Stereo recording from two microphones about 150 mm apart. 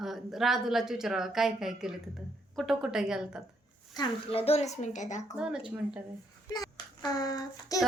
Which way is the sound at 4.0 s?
40° left (ahead or behind).